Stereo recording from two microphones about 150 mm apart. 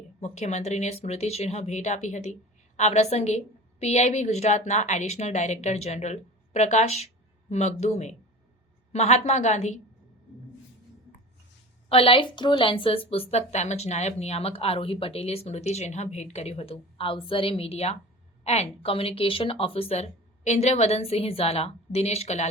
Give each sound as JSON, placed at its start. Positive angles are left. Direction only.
{"t": 0.2, "sound": "speech", "side_deg": 50}
{"t": 11.9, "sound": "a woman's voice", "side_deg": 35}